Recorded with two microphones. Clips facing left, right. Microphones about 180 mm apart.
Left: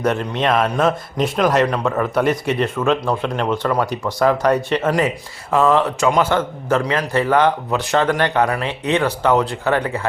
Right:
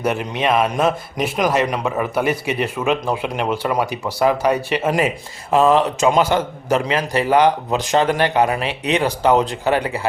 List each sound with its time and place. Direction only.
0.0 s a man's voice: 10° right (ahead or behind)
4.9 s a man's voice: 20° right (ahead or behind)